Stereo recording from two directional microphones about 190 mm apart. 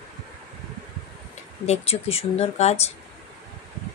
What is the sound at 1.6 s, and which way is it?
Speech, 35° left (ahead or behind).